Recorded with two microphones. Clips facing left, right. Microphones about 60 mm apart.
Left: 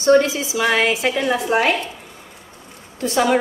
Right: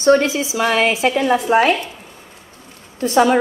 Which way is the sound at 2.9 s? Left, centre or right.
Right.